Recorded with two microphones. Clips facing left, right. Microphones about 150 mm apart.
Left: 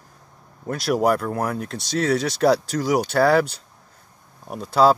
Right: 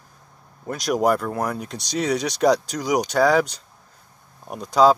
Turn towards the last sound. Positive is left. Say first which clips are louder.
# right 1 dB
turn(degrees=5)  # may be behind; listen again after turning